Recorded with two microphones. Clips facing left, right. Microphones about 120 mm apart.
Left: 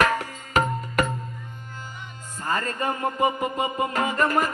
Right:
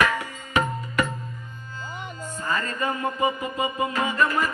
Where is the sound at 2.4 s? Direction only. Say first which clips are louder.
Left 1 dB; 40° left (ahead or behind).